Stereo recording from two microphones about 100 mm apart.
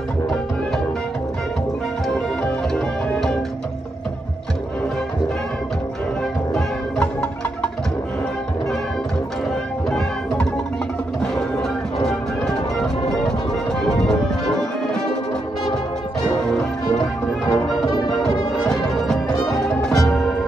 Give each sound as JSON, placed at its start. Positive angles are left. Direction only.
{"t": 2.7, "sound": "music", "side_deg": 5}
{"t": 6.5, "sound": "music", "side_deg": 10}
{"t": 9.8, "sound": "music", "side_deg": 5}
{"t": 12.4, "sound": "music", "side_deg": 5}
{"t": 16.4, "sound": "music", "side_deg": 5}
{"t": 17.5, "sound": "music", "side_deg": 40}
{"t": 18.7, "sound": "music", "side_deg": 5}